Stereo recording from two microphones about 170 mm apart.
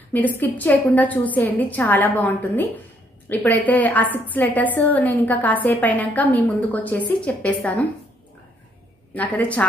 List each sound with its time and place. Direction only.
0.4 s a woman's voice: 10° left (ahead or behind)
9.1 s a woman's voice: 10° left (ahead or behind)